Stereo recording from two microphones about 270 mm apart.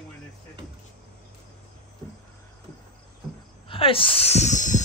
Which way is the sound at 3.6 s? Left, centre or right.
Centre.